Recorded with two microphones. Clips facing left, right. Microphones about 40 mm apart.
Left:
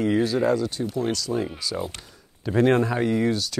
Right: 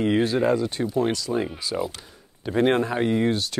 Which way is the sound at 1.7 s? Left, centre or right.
Centre.